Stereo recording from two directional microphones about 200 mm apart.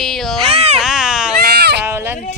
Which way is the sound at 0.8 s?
Centre (ahead or behind).